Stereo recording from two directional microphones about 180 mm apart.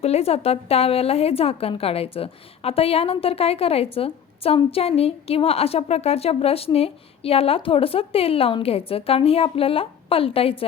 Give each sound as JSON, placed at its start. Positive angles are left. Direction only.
{"t": 0.0, "sound": "a woman's voice", "side_deg": 35}